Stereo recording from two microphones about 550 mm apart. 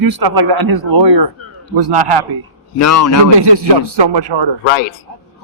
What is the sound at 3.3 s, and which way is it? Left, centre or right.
Speech, right.